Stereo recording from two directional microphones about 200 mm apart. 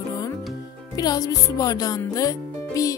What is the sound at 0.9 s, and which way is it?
Speech, 20° left (ahead or behind).